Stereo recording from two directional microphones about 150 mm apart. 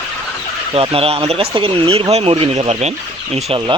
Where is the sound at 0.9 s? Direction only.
40° right (ahead or behind).